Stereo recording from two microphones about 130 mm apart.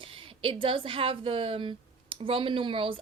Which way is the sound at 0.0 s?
45° right (ahead or behind).